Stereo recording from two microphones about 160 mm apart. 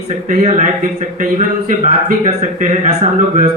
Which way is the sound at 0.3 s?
50° right (ahead or behind).